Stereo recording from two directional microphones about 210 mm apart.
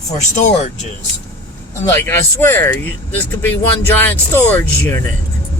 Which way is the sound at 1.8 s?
10° left (ahead or behind).